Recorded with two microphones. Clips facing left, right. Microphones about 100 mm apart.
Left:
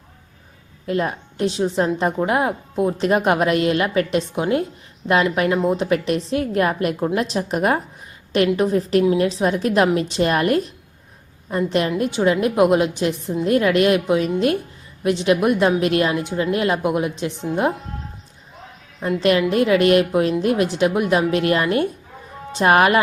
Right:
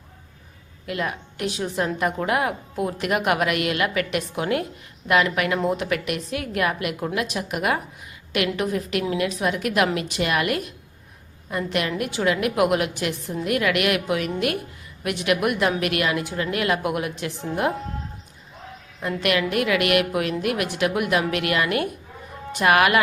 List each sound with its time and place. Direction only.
0.9 s a woman's voice: 30° left (ahead or behind)
18.9 s a woman's voice: 15° left (ahead or behind)
19.2 s a woman's voice: 25° left (ahead or behind)